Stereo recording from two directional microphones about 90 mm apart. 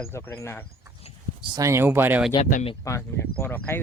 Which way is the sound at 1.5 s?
35° right (ahead or behind).